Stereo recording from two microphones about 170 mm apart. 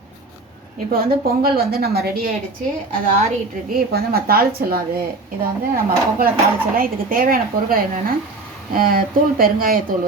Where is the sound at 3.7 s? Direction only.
60° right (ahead or behind).